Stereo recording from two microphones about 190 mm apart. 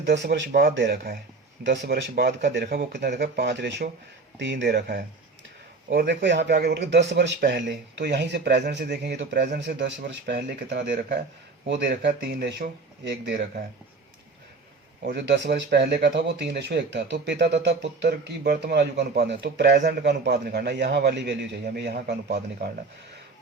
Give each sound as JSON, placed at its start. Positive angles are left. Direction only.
{"t": 0.0, "sound": "speech", "side_deg": -65}
{"t": 13.1, "sound": "speech", "side_deg": -65}
{"t": 15.1, "sound": "speech", "side_deg": -65}